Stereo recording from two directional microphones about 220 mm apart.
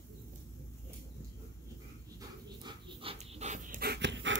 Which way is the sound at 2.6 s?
20° right (ahead or behind).